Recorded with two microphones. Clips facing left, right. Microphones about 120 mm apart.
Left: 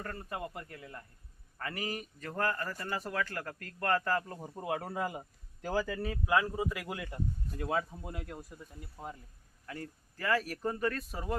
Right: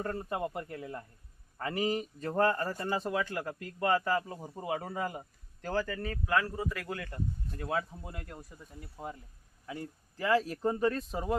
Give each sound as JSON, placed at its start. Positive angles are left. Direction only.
{"t": 0.0, "sound": "speech", "side_deg": -25}
{"t": 9.6, "sound": "speech", "side_deg": -15}